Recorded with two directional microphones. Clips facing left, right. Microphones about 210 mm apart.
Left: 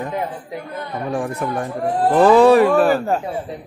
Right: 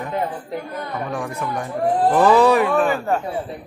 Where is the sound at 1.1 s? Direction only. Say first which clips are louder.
Left 6 dB; 30° left (ahead or behind).